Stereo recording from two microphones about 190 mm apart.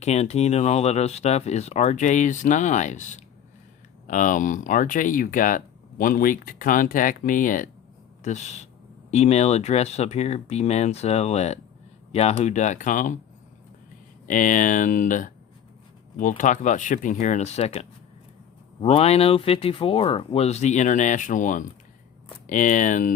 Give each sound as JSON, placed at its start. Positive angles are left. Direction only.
{"t": 0.0, "sound": "speech", "side_deg": 35}
{"t": 14.3, "sound": "speech", "side_deg": 45}
{"t": 16.4, "sound": "speech", "side_deg": 40}